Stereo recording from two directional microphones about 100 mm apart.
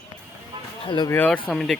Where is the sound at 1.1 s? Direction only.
15° left (ahead or behind).